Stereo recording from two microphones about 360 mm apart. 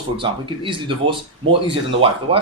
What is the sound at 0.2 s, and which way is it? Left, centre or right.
Speech, centre.